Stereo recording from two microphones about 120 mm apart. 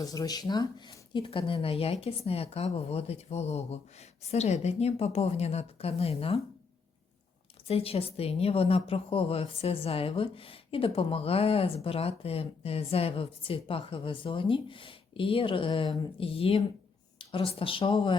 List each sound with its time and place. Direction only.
0.0 s speech: 30° left (ahead or behind); by 6.4 s 55° left (ahead or behind)
7.7 s a woman's voice: 55° left (ahead or behind)